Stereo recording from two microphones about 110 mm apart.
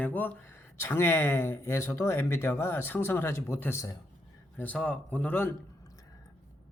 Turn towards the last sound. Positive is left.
turn(degrees=30)  # may be behind; listen again after turning